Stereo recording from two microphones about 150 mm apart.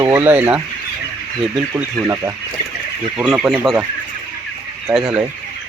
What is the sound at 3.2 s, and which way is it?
Speech, 5° right (ahead or behind).